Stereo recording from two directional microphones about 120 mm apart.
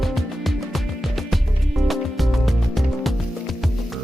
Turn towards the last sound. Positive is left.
turn(degrees=0)  # may be behind; listen again after turning